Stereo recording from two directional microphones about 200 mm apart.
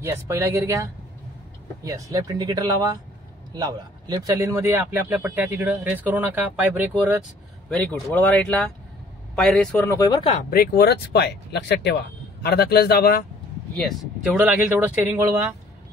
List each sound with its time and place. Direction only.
0.0 s speech: 15° right (ahead or behind)
1.9 s speech: 15° right (ahead or behind)
7.7 s speech: 5° left (ahead or behind)
9.8 s speech: 20° left (ahead or behind)
10.5 s speech: 50° left (ahead or behind)
13.7 s speech: centre (ahead or behind)